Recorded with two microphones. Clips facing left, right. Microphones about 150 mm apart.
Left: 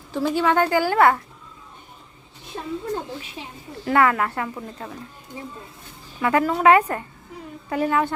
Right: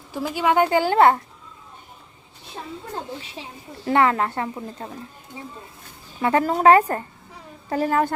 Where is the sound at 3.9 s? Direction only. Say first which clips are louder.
Even; 25° right (ahead or behind).